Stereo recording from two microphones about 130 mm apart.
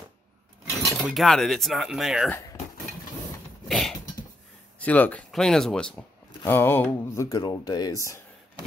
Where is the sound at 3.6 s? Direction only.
Centre (ahead or behind).